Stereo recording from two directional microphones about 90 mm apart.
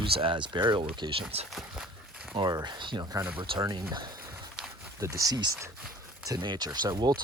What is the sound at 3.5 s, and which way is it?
Speech, 80° right.